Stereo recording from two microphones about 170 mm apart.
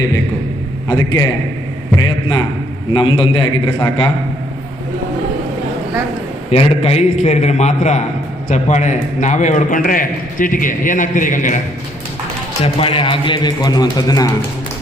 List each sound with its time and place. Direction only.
0.9 s a man's voice: 20° left (ahead or behind)
6.5 s a man's voice: 35° left (ahead or behind)
12.6 s a man's voice: 30° left (ahead or behind)